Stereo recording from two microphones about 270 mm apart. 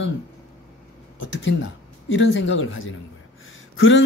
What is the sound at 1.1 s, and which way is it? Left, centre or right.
Speech, left.